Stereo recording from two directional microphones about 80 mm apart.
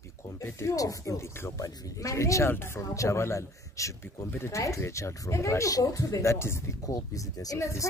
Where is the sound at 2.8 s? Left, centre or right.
Left.